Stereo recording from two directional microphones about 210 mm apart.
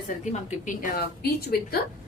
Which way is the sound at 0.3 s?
35° left (ahead or behind).